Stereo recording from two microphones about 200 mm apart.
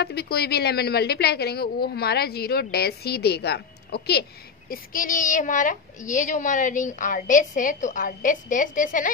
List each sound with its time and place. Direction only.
0.0 s a woman's voice: 50° left (ahead or behind)